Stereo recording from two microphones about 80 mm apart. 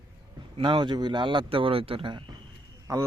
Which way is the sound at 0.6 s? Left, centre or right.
Right.